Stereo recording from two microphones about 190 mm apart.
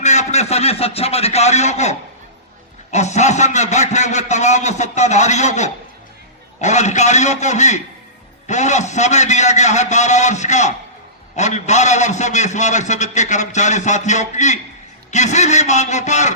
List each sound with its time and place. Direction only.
0.0 s a man's voice: 35° left (ahead or behind)